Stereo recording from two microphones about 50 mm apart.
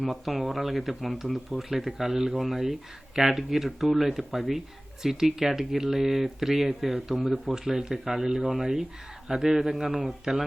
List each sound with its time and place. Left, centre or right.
0.0 s speech: centre